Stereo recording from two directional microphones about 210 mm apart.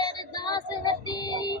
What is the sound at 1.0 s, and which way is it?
Music, 20° left (ahead or behind).